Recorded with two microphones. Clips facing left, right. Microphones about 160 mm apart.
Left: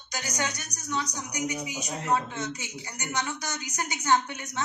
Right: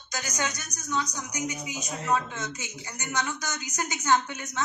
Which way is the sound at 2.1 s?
15° left (ahead or behind).